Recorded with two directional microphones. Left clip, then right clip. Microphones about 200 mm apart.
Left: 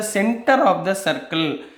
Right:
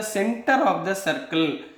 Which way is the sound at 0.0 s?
30° left (ahead or behind).